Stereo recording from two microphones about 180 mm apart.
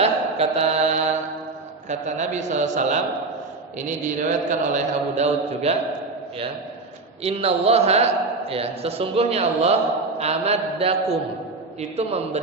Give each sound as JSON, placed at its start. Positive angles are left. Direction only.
{"t": 0.0, "sound": "mantra", "side_deg": -35}
{"t": 1.9, "sound": "a man's voice", "side_deg": -40}
{"t": 7.3, "sound": "a man's voice", "side_deg": -35}